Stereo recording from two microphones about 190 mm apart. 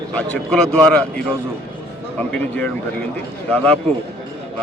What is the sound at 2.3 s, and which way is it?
A man's voice, 5° left (ahead or behind).